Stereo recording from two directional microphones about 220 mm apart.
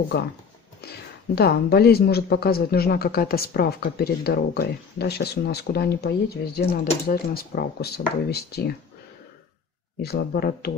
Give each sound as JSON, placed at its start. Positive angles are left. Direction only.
{"t": 1.3, "sound": "speech", "side_deg": 45}
{"t": 10.0, "sound": "speech", "side_deg": 45}